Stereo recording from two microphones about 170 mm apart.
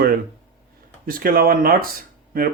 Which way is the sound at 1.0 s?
55° right (ahead or behind).